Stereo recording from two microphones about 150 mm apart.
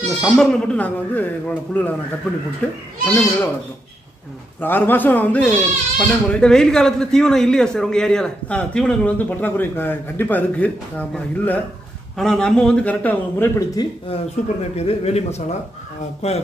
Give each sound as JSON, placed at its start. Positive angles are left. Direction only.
{"t": 0.2, "sound": "speech", "side_deg": 5}
{"t": 4.6, "sound": "a man's voice", "side_deg": 15}
{"t": 13.7, "sound": "speech", "side_deg": 40}